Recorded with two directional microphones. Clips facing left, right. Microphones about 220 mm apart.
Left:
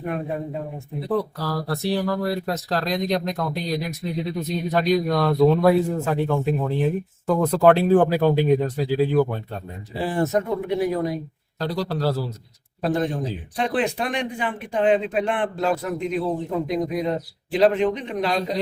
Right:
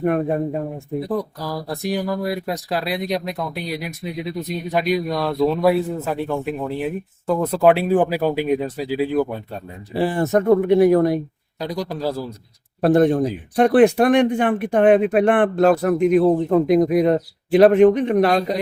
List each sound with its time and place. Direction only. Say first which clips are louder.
0.0 s speech: right 8 dB; 55° right (ahead or behind)
1.0 s speech: left 4 dB; 15° right (ahead or behind)
9.9 s speech: right 4 dB; 65° right (ahead or behind)
11.6 s speech: even; 10° right (ahead or behind)
12.8 s speech: right 8 dB; 55° right (ahead or behind)